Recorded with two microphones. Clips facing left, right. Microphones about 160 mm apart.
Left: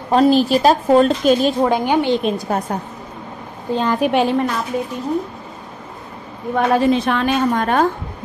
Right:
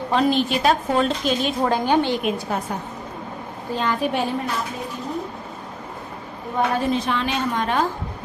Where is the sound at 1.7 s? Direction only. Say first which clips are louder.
Left 3 dB; 15° left (ahead or behind).